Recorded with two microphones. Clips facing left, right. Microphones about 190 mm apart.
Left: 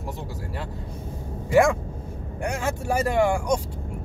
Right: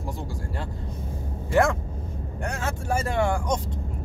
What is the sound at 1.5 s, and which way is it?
Speech, 10° left (ahead or behind).